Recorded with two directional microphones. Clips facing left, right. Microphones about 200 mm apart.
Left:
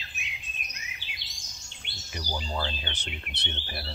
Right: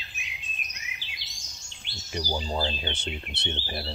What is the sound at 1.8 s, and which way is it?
Bird, 60° left (ahead or behind).